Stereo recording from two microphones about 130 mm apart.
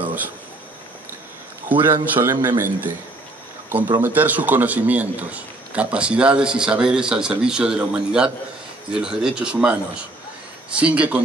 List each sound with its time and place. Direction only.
1.7 s a man's voice: 15° right (ahead or behind)
4.0 s a man's voice: 15° right (ahead or behind)
10.8 s a man's voice: 10° right (ahead or behind)